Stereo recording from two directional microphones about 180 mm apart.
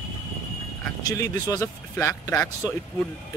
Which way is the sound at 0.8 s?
20° left (ahead or behind).